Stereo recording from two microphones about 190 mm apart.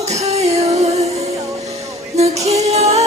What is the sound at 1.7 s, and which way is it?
Music, 35° right (ahead or behind).